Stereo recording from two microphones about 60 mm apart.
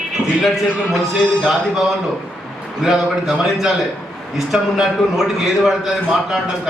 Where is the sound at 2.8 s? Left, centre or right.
Centre.